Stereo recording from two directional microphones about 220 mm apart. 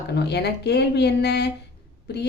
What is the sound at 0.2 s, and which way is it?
A woman's voice, 50° left (ahead or behind).